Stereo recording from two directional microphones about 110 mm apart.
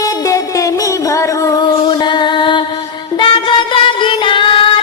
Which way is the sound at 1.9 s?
45° left (ahead or behind).